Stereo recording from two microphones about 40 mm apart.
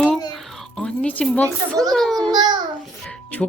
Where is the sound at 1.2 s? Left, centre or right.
Left.